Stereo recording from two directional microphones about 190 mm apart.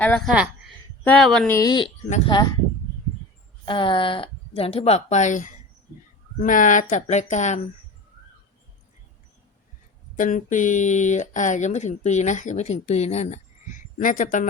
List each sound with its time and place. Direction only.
0.0 s speech: 5° left (ahead or behind)
1.5 s speech: 20° left (ahead or behind)
2.0 s speech: 35° left (ahead or behind)
3.7 s speech: 25° left (ahead or behind)
10.2 s speech: 45° left (ahead or behind)